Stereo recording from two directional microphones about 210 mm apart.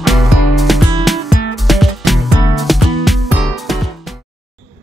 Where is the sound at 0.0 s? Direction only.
Centre (ahead or behind).